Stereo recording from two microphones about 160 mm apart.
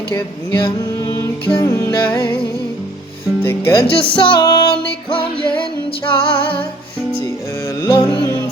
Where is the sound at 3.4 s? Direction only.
15° left (ahead or behind).